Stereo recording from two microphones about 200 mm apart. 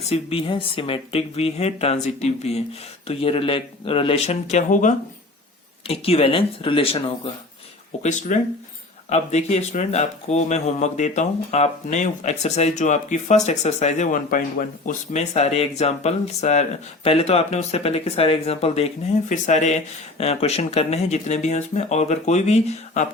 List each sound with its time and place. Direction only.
0.0 s speech: 30° left (ahead or behind)
8.0 s speech: 35° left (ahead or behind)